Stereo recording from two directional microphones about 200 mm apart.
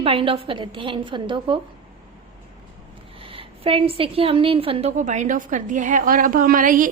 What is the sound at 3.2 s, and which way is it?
A woman's voice, 25° right (ahead or behind).